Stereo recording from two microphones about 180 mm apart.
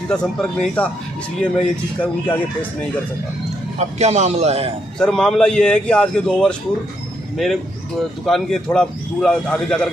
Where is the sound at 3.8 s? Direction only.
40° right (ahead or behind).